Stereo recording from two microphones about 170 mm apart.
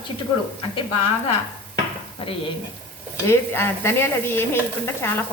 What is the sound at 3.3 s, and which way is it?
A woman's voice, 15° left (ahead or behind).